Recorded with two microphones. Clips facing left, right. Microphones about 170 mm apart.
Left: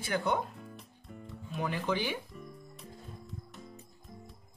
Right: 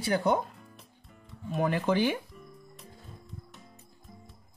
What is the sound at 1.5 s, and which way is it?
Speech, 50° right (ahead or behind).